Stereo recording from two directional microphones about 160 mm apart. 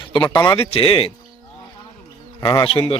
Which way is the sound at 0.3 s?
25° left (ahead or behind).